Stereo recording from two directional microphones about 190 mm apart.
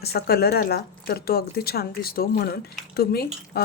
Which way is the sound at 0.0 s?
55° left (ahead or behind).